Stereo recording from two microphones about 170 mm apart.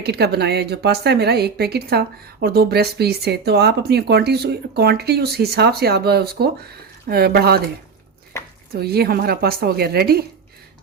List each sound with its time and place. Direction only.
0.0 s speech: 75° right (ahead or behind)
8.3 s a sound: 15° left (ahead or behind)
8.7 s a woman's voice: 65° right (ahead or behind)